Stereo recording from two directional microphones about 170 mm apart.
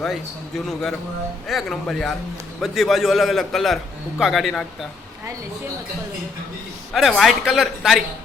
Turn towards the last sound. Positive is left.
turn(degrees=0)  # may be behind; listen again after turning